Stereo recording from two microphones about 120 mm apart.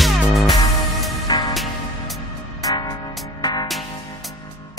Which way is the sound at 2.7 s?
30° left (ahead or behind).